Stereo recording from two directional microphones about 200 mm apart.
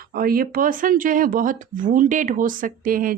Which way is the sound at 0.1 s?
45° right (ahead or behind).